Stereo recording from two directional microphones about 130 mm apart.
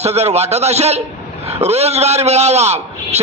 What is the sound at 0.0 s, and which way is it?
A man's voice, 55° right (ahead or behind).